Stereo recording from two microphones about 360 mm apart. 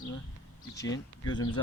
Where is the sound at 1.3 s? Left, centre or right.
Centre.